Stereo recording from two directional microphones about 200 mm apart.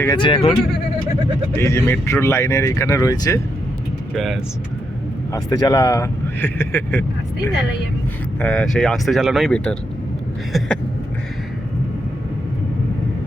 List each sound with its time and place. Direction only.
0.0 s speech: 20° left (ahead or behind)
1.5 s speech: 15° left (ahead or behind)
4.1 s speech: centre (ahead or behind)
5.3 s speech: 20° left (ahead or behind)
8.4 s speech: 5° left (ahead or behind)